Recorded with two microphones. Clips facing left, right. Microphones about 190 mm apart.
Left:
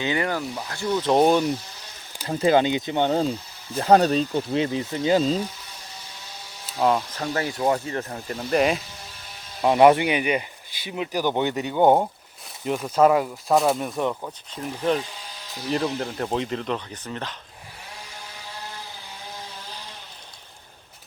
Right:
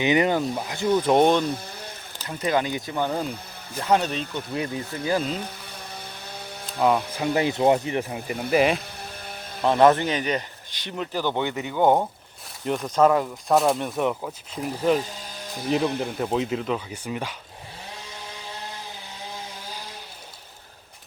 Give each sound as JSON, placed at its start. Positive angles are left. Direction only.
{"t": 0.0, "sound": "speech", "side_deg": -20}
{"t": 1.2, "sound": "speech", "side_deg": 5}
{"t": 2.2, "sound": "speech", "side_deg": 30}
{"t": 6.7, "sound": "speech", "side_deg": 0}
{"t": 7.2, "sound": "speech", "side_deg": -20}
{"t": 8.4, "sound": "speech", "side_deg": 0}
{"t": 9.6, "sound": "speech", "side_deg": 10}
{"t": 12.6, "sound": "speech", "side_deg": 5}